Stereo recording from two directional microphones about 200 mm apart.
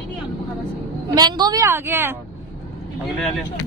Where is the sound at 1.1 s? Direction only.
20° right (ahead or behind).